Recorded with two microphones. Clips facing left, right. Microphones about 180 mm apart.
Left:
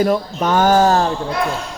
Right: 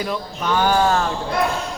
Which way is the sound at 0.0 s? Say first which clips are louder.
Left 8 dB; 45° left (ahead or behind).